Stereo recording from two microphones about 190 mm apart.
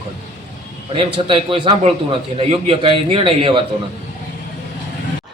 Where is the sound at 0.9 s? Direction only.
30° right (ahead or behind).